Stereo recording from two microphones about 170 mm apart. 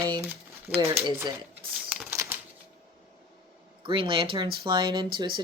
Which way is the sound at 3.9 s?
30° right (ahead or behind).